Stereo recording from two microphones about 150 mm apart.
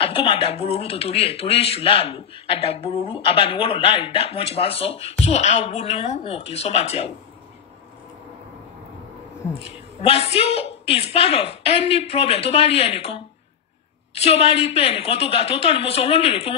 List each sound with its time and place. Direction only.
0.0 s speech: 35° left (ahead or behind)
9.6 s speech: 40° left (ahead or behind)